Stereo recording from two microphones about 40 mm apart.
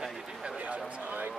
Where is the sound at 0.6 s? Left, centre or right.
Right.